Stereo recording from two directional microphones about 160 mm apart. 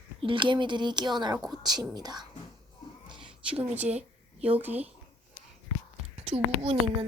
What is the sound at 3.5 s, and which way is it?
Speech, 10° right (ahead or behind).